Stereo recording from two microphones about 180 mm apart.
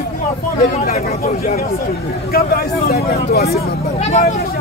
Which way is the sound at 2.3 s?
55° left (ahead or behind).